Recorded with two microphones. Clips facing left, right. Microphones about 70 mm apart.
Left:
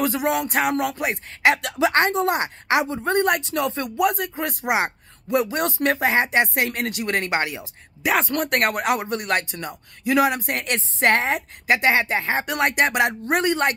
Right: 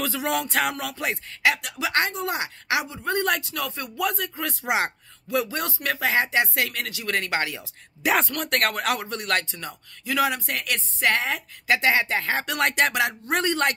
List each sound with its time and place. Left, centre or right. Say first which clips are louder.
0.0 s speech: left 4 dB; left
10.7 s speech: left 4 dB; left